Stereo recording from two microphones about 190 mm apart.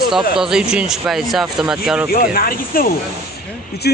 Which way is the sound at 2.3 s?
50° left (ahead or behind).